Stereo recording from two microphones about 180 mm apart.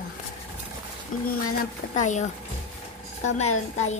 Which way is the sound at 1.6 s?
40° left (ahead or behind).